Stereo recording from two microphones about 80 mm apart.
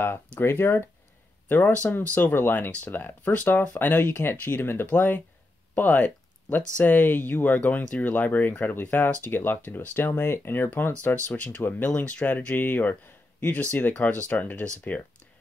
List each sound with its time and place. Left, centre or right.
0.0 s speech: left
1.5 s speech: centre